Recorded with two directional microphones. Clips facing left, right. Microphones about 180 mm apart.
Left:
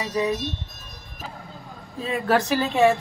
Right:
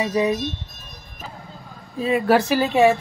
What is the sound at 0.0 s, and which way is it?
Speech, 15° right (ahead or behind).